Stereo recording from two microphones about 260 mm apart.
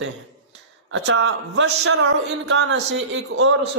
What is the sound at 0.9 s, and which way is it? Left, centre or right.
A man's voice, right.